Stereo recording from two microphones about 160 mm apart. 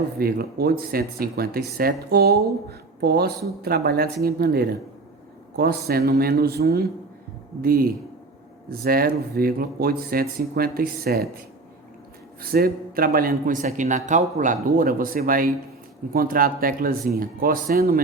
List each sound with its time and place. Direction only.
0.2 s a woman's voice: 70° right (ahead or behind)
7.6 s a man's voice: 65° right (ahead or behind)
12.4 s a man's voice: 70° right (ahead or behind)